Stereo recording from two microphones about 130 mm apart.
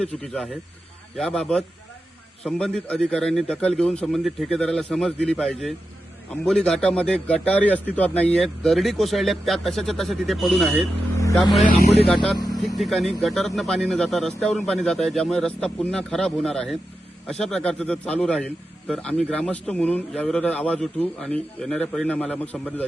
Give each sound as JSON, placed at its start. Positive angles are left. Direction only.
{"t": 0.2, "sound": "a man's voice", "side_deg": 0}
{"t": 11.2, "sound": "vehicle", "side_deg": 25}
{"t": 12.0, "sound": "a man's voice", "side_deg": 5}